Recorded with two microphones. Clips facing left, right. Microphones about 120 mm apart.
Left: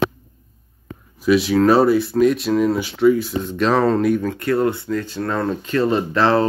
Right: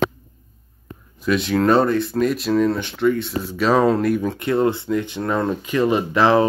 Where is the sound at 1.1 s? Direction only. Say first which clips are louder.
Left 4 dB; 5° left (ahead or behind).